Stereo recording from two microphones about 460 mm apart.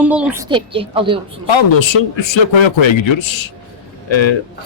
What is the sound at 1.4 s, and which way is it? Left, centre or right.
A man's voice, left.